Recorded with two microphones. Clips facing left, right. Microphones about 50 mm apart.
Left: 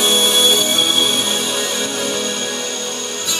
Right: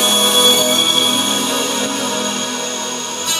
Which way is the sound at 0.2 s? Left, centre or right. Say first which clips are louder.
Right 2 dB; centre.